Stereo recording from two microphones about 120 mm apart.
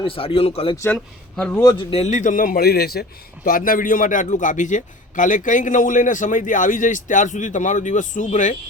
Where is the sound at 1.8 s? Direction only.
55° left (ahead or behind); by 2.4 s 85° left.